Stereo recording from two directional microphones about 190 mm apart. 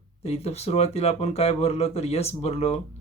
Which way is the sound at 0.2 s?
30° left (ahead or behind).